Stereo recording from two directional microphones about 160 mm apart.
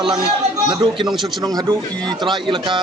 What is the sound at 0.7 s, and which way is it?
Speech, 30° right (ahead or behind).